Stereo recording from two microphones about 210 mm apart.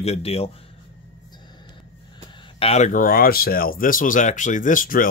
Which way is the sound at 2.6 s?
30° left (ahead or behind).